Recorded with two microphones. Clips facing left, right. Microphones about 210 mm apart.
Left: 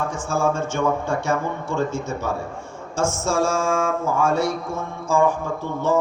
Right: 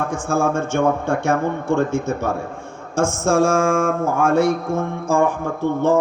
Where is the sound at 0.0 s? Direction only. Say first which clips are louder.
Right 3 dB; 55° right (ahead or behind).